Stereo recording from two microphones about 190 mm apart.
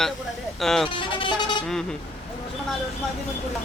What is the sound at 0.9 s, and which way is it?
Vehicle, 25° left (ahead or behind).